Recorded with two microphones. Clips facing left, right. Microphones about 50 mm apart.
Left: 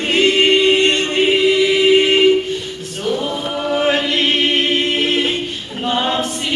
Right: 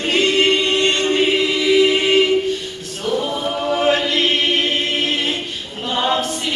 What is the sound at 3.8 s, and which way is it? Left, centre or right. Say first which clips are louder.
Chant: even; centre.